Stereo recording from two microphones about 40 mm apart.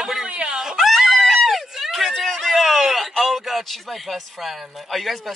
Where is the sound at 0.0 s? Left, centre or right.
Centre.